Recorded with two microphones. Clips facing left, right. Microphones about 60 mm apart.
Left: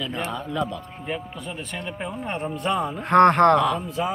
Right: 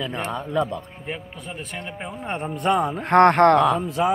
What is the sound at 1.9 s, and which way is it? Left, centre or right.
Speech, centre.